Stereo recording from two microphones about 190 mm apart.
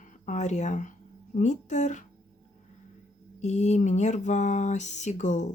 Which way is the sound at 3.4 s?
40° left (ahead or behind).